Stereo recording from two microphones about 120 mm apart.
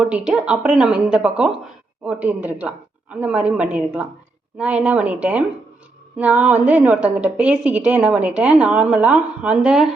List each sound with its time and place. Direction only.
0.0 s a woman's voice: 10° right (ahead or behind)